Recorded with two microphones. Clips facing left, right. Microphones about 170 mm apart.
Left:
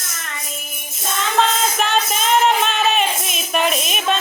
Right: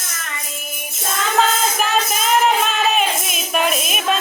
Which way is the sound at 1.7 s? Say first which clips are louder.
Even; 5° right (ahead or behind).